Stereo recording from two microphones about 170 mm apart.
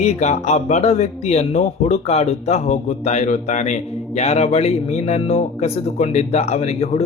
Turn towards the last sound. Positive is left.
turn(degrees=40)  # may be behind; listen again after turning